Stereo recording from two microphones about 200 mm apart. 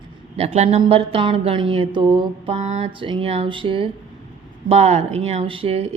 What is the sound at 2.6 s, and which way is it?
A woman's voice, 35° right (ahead or behind).